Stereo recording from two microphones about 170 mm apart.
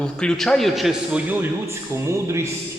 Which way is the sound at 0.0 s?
5° left (ahead or behind).